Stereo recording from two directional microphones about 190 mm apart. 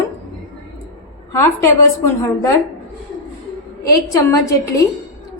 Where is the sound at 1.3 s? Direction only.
15° left (ahead or behind).